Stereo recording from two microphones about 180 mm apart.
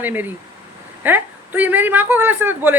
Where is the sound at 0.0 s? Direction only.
10° right (ahead or behind).